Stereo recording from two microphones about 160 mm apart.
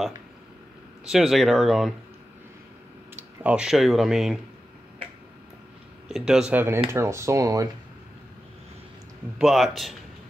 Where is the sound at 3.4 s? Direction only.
5° right (ahead or behind).